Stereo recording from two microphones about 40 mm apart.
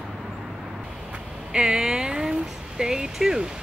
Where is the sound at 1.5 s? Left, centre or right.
Right.